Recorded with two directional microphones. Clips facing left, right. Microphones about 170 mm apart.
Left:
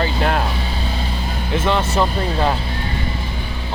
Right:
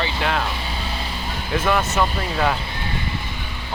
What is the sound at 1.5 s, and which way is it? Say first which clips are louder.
Speech: left 1 dB; 25° left (ahead or behind).